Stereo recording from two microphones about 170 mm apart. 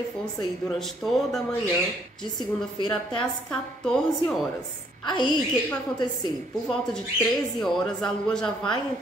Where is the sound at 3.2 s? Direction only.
5° left (ahead or behind).